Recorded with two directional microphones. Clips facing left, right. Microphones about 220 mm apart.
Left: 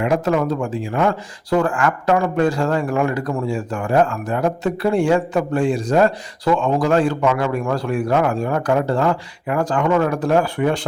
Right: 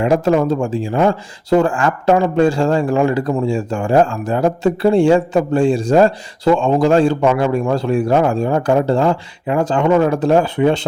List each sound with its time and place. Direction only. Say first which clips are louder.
0.0 s speech: right 4 dB; 30° right (ahead or behind)